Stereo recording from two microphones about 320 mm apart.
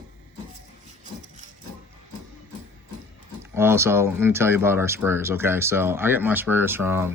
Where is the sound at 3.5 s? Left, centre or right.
Centre.